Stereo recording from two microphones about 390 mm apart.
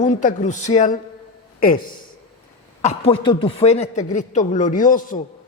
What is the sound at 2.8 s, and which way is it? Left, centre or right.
A man's voice, centre.